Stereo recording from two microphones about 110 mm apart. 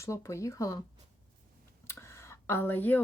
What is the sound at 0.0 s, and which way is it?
Speech, 25° left (ahead or behind).